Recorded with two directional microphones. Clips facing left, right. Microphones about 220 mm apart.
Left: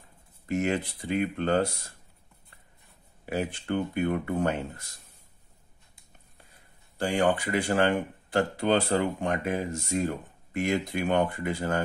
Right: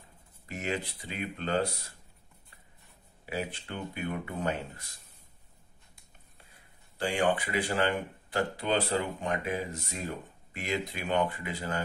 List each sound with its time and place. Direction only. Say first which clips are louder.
0.5 s speech: left 7 dB; 50° left (ahead or behind)
3.3 s speech: left 6 dB; 50° left (ahead or behind)
7.0 s speech: left 3 dB; 45° left (ahead or behind)